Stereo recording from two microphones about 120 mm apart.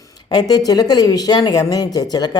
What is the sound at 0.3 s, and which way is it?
Speech, 35° left (ahead or behind).